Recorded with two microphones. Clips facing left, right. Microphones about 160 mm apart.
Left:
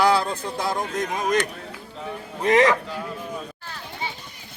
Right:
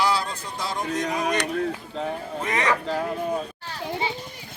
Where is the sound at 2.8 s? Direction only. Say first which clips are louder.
Right 6 dB; 75° right (ahead or behind).